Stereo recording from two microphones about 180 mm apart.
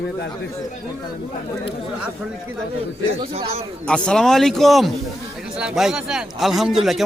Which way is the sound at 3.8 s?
5° left (ahead or behind).